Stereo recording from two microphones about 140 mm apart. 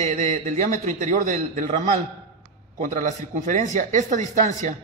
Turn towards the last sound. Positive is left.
turn(degrees=-60)  # may be behind; listen again after turning